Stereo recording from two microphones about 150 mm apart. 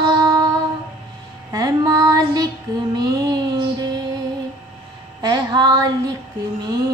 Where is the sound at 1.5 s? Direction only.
25° right (ahead or behind).